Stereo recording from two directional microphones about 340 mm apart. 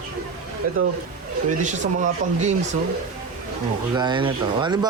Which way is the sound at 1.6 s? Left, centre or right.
Right.